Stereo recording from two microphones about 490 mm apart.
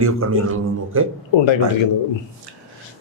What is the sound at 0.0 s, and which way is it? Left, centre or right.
A man's voice, right.